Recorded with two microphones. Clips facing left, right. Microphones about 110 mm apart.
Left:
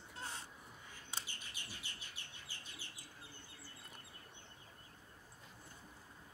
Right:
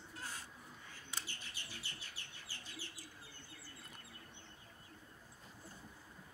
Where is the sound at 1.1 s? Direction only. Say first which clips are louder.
Even; 15° left (ahead or behind).